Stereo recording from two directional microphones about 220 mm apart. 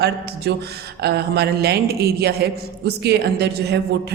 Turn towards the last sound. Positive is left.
turn(degrees=-50)  # may be behind; listen again after turning